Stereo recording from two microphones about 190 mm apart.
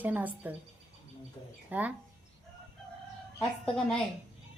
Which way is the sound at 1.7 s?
10° right (ahead or behind).